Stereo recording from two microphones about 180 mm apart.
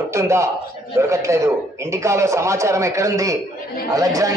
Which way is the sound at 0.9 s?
15° right (ahead or behind).